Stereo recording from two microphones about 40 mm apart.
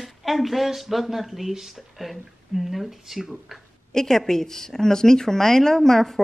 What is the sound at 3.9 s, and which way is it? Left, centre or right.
Speech, centre.